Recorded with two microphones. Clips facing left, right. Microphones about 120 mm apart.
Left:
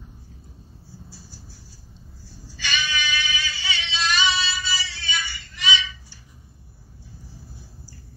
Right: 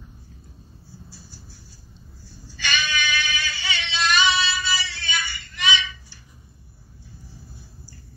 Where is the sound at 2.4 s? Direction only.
60° right (ahead or behind).